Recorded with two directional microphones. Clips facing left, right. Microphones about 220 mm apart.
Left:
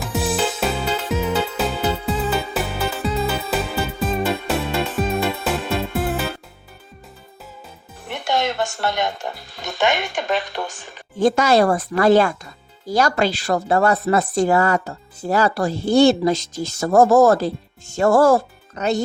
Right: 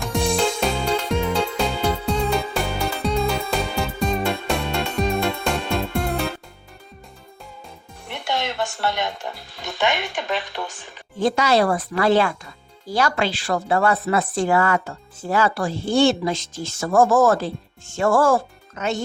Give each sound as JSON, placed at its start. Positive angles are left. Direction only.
{"t": 0.0, "sound": "music", "side_deg": 5}
{"t": 8.1, "sound": "speech", "side_deg": 45}